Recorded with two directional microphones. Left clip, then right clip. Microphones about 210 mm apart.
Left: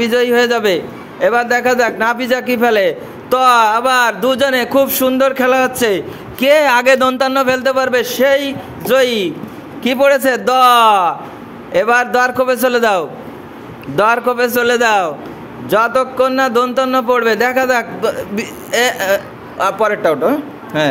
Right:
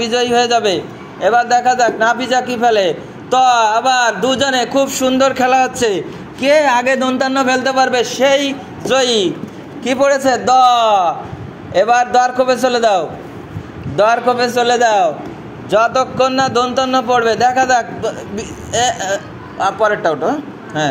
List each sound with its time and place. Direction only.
0.0 s a man's voice: 30° left (ahead or behind)
6.5 s a man's voice: 45° left (ahead or behind)
15.7 s a man's voice: 25° left (ahead or behind)